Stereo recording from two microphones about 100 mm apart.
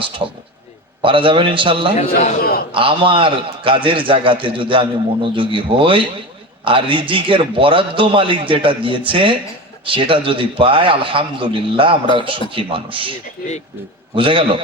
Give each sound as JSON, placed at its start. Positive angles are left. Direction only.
{"t": 0.0, "sound": "a man's voice", "side_deg": -60}
{"t": 14.2, "sound": "a man's voice", "side_deg": -60}